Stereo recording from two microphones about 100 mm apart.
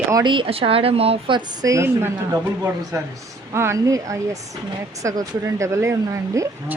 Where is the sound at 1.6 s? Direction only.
30° right (ahead or behind).